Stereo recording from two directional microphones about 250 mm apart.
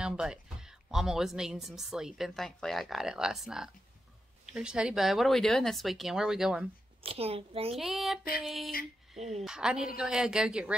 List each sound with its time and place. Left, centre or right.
0.0 s speech: centre
7.1 s a child's voice: right
7.7 s speech: centre